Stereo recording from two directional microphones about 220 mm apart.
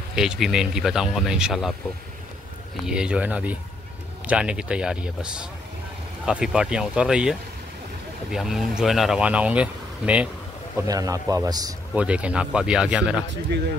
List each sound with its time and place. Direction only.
0.1 s speech: 5° right (ahead or behind)
2.9 s a man's voice: 5° right (ahead or behind)
11.9 s speech: 5° right (ahead or behind)